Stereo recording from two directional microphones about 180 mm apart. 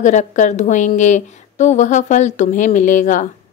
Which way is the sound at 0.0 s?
45° left (ahead or behind).